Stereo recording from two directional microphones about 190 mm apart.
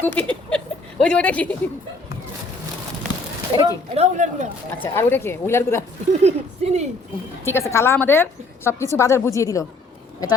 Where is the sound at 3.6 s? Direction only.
35° right (ahead or behind).